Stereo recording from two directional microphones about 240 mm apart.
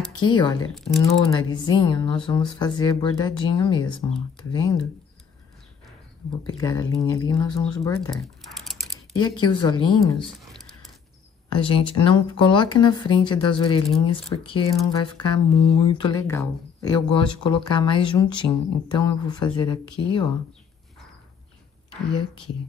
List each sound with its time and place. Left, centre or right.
0.2 s speech: centre
0.7 s speech: centre
1.0 s speech: centre
6.4 s speech: centre
9.2 s speech: centre
11.4 s speech: centre